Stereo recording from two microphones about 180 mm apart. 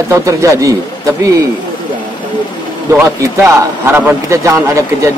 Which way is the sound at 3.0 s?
15° right (ahead or behind).